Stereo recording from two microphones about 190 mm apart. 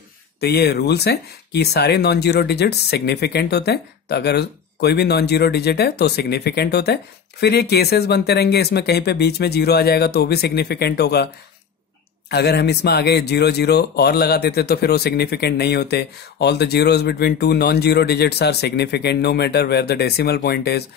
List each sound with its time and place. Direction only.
0.4 s speech: 60° left (ahead or behind)
12.3 s speech: 60° left (ahead or behind)